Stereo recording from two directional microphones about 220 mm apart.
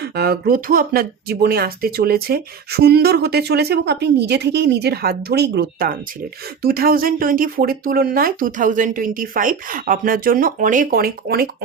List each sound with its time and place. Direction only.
0.0 s speech: 45° right (ahead or behind)